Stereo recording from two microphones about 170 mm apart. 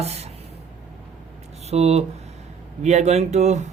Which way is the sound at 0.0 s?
40° right (ahead or behind).